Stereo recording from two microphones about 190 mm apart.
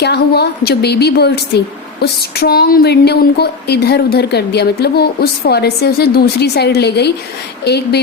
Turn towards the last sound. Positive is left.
turn(degrees=60)  # may be behind; listen again after turning